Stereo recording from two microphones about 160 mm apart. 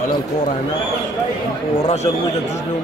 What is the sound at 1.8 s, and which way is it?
Speech, 45° left (ahead or behind).